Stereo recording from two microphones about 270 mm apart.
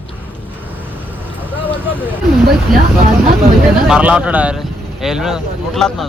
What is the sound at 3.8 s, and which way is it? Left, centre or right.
Speech, centre.